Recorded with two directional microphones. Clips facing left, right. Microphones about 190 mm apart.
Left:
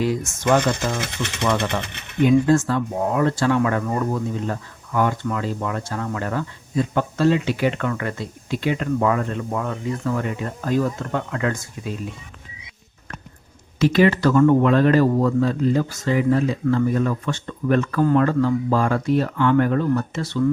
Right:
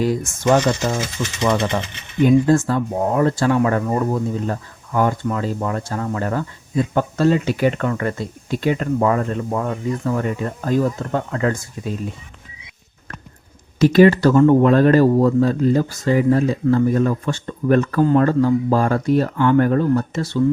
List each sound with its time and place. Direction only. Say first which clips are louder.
0.0 s speech: right 2 dB; 40° right (ahead or behind)
0.6 s speech: right 3 dB; 55° left (ahead or behind)
2.2 s speech: right 2 dB; 40° right (ahead or behind)
13.7 s speech: right 5 dB; 45° right (ahead or behind)